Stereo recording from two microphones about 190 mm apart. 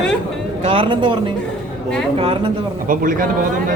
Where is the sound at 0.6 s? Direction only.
25° right (ahead or behind).